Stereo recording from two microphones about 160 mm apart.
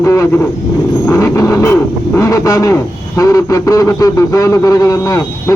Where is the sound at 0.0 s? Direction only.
20° left (ahead or behind).